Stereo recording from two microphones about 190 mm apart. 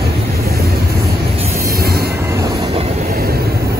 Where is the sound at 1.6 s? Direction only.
55° right (ahead or behind).